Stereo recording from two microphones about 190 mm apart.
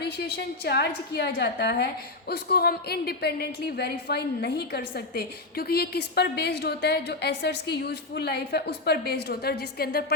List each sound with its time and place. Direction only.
0.0 s a woman's voice: 60° left (ahead or behind)